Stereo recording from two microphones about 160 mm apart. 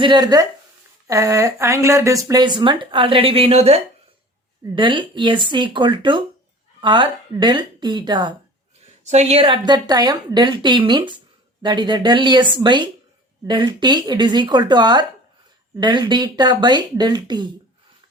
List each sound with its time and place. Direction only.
0.0 s speech: 25° right (ahead or behind)
4.7 s speech: 30° right (ahead or behind)
9.0 s speech: 40° right (ahead or behind); by 17.5 s 25° right (ahead or behind)